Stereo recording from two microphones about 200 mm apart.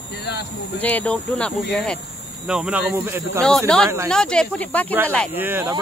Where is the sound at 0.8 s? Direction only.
5° left (ahead or behind); by 3.4 s 10° right (ahead or behind).